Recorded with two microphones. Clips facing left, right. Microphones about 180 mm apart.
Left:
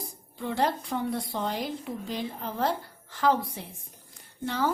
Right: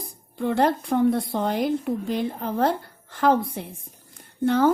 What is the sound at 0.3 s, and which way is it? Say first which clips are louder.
A woman's voice: right 6 dB; 55° right (ahead or behind).